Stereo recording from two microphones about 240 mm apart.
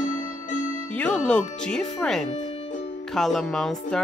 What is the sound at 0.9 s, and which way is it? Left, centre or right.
Speech, centre.